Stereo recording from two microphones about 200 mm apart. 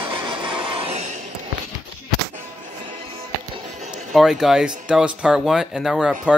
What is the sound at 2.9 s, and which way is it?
Music, 25° right (ahead or behind).